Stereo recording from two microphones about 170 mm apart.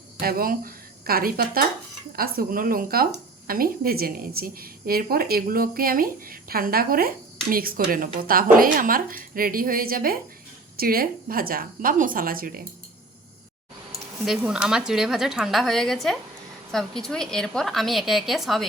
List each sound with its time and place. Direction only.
0.2 s a woman's voice: 60° right (ahead or behind)
14.3 s a woman's voice: 5° right (ahead or behind)